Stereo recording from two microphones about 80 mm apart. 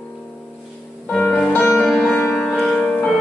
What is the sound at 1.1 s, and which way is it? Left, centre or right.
Music, centre.